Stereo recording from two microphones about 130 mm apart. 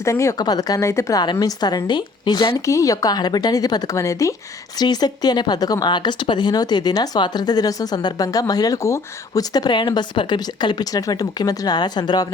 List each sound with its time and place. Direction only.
0.0 s a woman's voice: 25° left (ahead or behind)